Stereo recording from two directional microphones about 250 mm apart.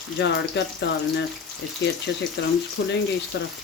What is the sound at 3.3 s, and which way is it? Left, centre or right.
Speech, left.